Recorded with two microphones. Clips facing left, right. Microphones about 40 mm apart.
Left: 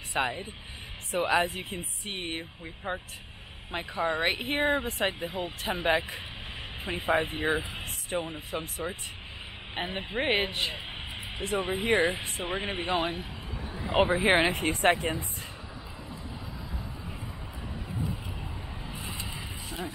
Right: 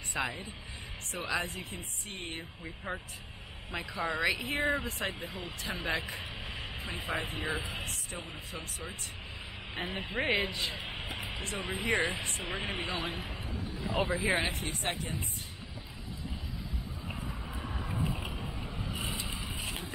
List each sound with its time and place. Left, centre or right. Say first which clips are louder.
0.1 s speech: left 5 dB; left
10.2 s speech: left 3 dB; centre
10.5 s speech: left 4 dB; left
10.9 s music: even; centre
11.5 s speech: left 6 dB; left
12.8 s speech: left 6 dB; left
19.0 s vehicle: even; left